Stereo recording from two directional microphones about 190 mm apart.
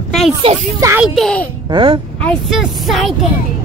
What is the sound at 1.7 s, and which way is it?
Speech, 25° right (ahead or behind).